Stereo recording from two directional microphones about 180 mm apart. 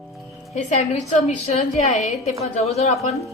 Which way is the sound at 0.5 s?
40° left (ahead or behind).